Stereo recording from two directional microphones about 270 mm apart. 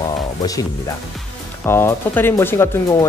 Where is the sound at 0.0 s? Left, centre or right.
Centre.